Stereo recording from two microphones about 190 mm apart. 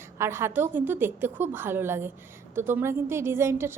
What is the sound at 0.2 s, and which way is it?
A woman's voice, 15° right (ahead or behind).